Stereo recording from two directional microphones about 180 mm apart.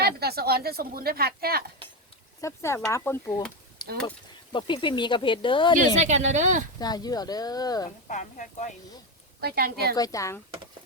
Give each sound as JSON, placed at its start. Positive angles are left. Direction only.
{"t": 0.0, "sound": "speech", "side_deg": -60}
{"t": 2.4, "sound": "speech", "side_deg": 15}
{"t": 3.8, "sound": "a sound", "side_deg": 25}
{"t": 4.5, "sound": "speech", "side_deg": 25}
{"t": 5.7, "sound": "speech", "side_deg": -40}
{"t": 6.7, "sound": "speech", "side_deg": 20}
{"t": 7.9, "sound": "a woman's voice", "side_deg": 40}
{"t": 9.4, "sound": "speech", "side_deg": -60}
{"t": 9.9, "sound": "speech", "side_deg": 20}